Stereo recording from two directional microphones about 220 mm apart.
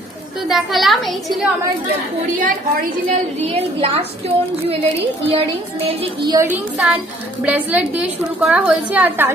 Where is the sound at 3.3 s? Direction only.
30° right (ahead or behind).